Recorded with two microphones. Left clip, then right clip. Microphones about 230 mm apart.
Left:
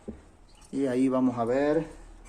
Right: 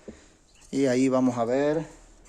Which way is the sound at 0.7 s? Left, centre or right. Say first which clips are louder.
Right 3 dB; right.